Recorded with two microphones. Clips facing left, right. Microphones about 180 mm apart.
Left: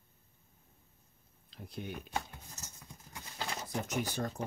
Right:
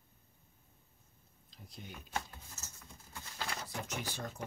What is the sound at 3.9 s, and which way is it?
Speech, 45° left (ahead or behind).